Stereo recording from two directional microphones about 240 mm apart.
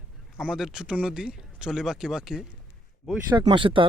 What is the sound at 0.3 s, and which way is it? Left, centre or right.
Speech, centre.